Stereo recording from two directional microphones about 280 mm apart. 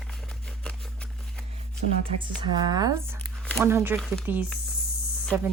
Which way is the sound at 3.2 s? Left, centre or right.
Centre.